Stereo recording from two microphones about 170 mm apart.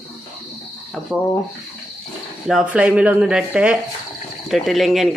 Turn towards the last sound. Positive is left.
turn(degrees=0)  # may be behind; listen again after turning